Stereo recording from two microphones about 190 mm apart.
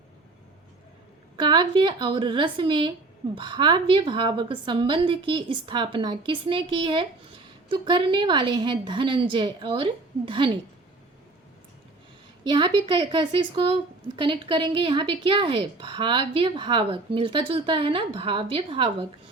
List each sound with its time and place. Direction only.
1.4 s a woman's voice: 25° right (ahead or behind)
12.5 s a woman's voice: 25° right (ahead or behind)